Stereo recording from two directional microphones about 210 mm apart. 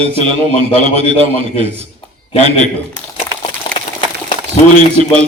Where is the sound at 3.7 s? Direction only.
20° left (ahead or behind).